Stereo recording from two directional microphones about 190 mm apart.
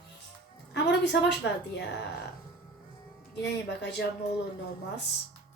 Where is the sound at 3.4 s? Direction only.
65° left (ahead or behind).